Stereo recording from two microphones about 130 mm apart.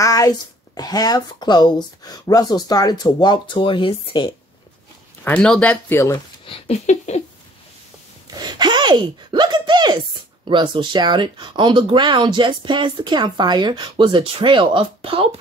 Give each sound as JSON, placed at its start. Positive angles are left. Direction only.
{"t": 0.0, "sound": "speech", "side_deg": 25}
{"t": 5.2, "sound": "speech", "side_deg": 5}
{"t": 5.9, "sound": "speech", "side_deg": 20}
{"t": 6.1, "sound": "speech", "side_deg": 45}
{"t": 6.9, "sound": "a sound", "side_deg": 60}
{"t": 8.4, "sound": "speech", "side_deg": -35}